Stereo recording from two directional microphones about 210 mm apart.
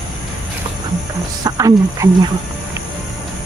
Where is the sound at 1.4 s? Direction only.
15° right (ahead or behind).